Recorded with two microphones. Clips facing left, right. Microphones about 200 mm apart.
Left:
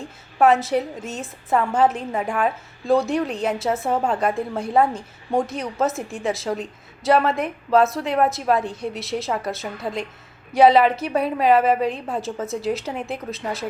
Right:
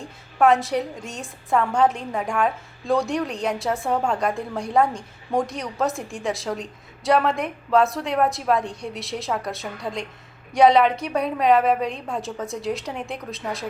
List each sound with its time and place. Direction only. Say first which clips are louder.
0.3 s a woman's voice: left 1 dB; 5° left (ahead or behind)